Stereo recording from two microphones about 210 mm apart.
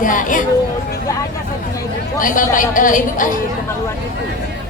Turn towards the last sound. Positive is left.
turn(degrees=40)  # may be behind; listen again after turning